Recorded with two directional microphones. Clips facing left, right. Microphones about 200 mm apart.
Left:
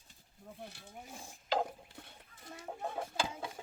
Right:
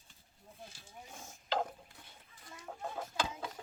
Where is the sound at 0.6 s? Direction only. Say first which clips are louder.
Left 3 dB; 65° left (ahead or behind).